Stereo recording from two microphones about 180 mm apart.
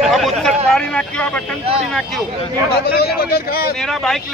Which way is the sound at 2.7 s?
60° left (ahead or behind).